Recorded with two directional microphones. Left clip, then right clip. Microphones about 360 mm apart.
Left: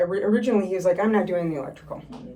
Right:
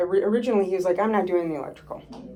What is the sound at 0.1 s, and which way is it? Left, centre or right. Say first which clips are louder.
Speech: right 1 dB; centre.